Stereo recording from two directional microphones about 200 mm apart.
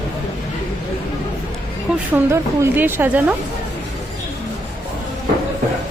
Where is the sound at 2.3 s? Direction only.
10° right (ahead or behind).